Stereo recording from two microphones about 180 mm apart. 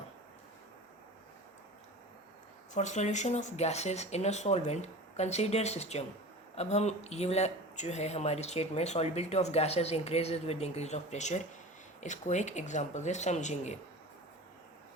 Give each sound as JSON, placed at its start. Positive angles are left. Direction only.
{"t": 2.7, "sound": "speech", "side_deg": 40}